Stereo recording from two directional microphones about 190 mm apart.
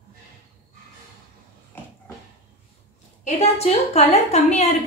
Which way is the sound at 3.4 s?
35° left (ahead or behind).